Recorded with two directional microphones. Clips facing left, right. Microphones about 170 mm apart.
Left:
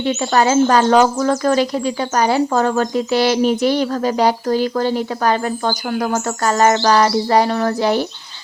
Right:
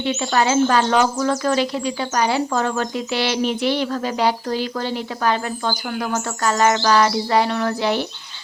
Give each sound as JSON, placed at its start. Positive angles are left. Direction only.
{"t": 0.0, "sound": "speech", "side_deg": 45}